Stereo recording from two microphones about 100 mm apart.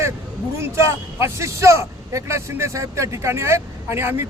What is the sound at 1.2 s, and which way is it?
A man's voice, 30° right (ahead or behind).